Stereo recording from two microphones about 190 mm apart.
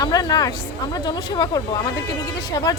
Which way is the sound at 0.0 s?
20° left (ahead or behind).